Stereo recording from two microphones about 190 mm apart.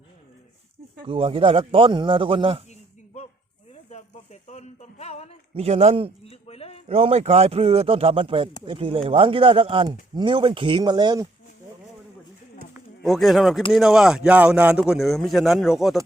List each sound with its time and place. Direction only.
1.0 s speech: 30° right (ahead or behind)
3.8 s speech: 40° left (ahead or behind)
5.5 s a man's voice: 35° right (ahead or behind)
6.2 s a sound: 30° left (ahead or behind)
6.8 s a man's voice: 35° right (ahead or behind)
13.0 s speech: centre (ahead or behind)